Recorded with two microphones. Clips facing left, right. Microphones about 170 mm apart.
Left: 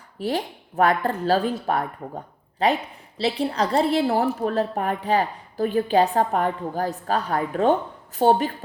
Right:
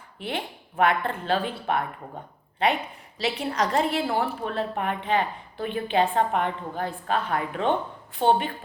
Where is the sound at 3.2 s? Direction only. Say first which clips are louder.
Left 3 dB; 35° left (ahead or behind).